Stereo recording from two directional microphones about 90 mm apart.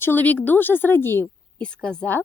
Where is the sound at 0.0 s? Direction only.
20° left (ahead or behind).